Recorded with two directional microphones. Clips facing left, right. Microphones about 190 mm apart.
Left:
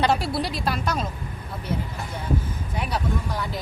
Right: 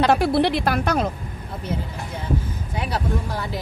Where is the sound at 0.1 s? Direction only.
55° right (ahead or behind).